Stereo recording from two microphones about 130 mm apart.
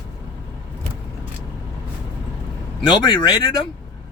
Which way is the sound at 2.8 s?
35° left (ahead or behind).